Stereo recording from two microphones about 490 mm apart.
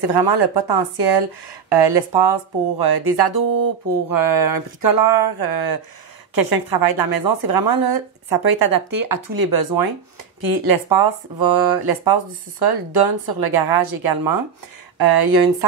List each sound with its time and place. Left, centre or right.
0.0 s speech: right